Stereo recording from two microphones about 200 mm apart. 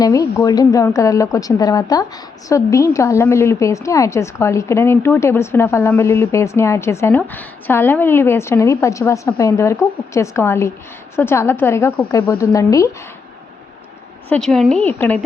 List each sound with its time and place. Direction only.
0.0 s a woman's voice: 15° left (ahead or behind)
14.3 s speech: 5° left (ahead or behind)